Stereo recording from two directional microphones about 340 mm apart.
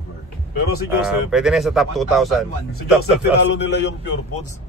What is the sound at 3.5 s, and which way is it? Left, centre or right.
Speech, left.